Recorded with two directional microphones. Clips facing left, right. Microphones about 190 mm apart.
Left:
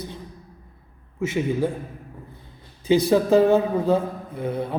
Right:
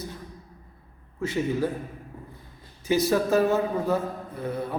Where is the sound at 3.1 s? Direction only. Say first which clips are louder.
Left 6 dB; 25° left (ahead or behind).